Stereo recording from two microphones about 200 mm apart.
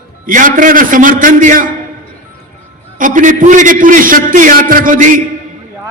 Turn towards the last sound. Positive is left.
turn(degrees=-40)  # may be behind; listen again after turning